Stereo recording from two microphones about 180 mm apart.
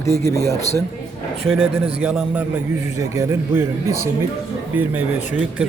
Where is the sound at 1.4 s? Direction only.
5° right (ahead or behind).